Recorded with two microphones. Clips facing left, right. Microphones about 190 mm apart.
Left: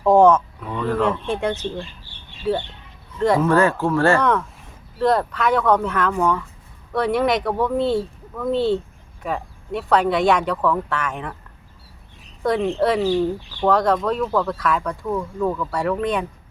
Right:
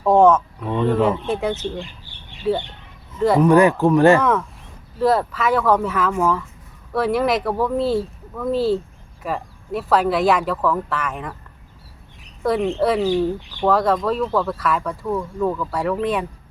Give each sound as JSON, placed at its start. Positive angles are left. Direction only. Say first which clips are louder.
{"t": 0.0, "sound": "speech", "louder": "even", "side_deg": 0}
{"t": 0.7, "sound": "speech", "louder": "right 4 dB", "side_deg": -25}
{"t": 1.3, "sound": "speech", "louder": "right 1 dB", "side_deg": -5}
{"t": 1.7, "sound": "speech", "louder": "even", "side_deg": -15}
{"t": 3.2, "sound": "speech", "louder": "right 1 dB", "side_deg": -5}
{"t": 3.4, "sound": "speech", "louder": "right 4 dB", "side_deg": -15}
{"t": 4.2, "sound": "speech", "louder": "even", "side_deg": -5}
{"t": 12.4, "sound": "speech", "louder": "right 1 dB", "side_deg": 0}
{"t": 13.7, "sound": "speech", "louder": "even", "side_deg": 0}